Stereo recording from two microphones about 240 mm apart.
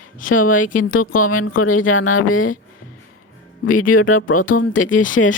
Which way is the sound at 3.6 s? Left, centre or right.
Left.